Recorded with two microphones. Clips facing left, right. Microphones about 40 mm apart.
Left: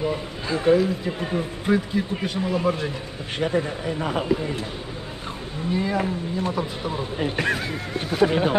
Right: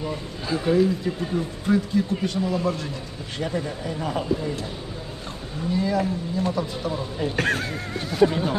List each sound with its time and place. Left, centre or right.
0.5 s speech: centre
1.2 s speech: left
5.7 s speech: left